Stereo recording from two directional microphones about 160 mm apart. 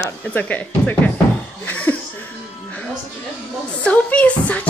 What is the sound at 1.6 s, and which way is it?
Laughter, 10° left (ahead or behind).